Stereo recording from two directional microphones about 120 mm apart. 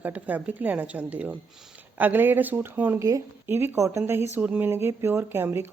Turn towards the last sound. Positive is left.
turn(degrees=-20)  # may be behind; listen again after turning